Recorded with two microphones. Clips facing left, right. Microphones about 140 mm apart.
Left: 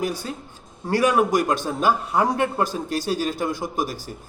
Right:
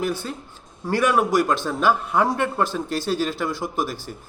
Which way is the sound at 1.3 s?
45° left (ahead or behind).